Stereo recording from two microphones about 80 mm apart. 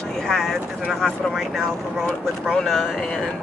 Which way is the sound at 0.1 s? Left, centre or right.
Centre.